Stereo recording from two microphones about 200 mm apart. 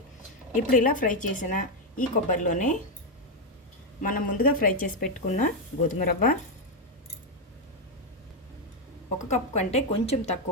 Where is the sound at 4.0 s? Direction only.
45° left (ahead or behind).